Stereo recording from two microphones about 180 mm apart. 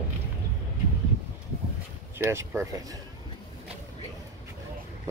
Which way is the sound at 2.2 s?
15° right (ahead or behind).